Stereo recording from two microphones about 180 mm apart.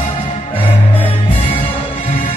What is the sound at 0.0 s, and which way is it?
Music, 35° left (ahead or behind).